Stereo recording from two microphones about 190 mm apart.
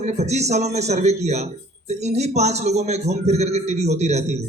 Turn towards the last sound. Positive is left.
turn(degrees=-35)  # may be behind; listen again after turning